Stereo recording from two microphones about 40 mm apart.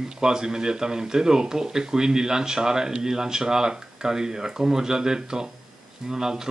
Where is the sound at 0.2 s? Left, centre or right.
Centre.